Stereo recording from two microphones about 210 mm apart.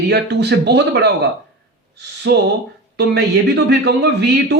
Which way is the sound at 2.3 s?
55° right (ahead or behind).